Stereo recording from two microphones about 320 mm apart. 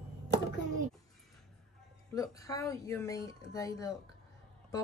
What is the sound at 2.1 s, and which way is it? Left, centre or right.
Speech, centre.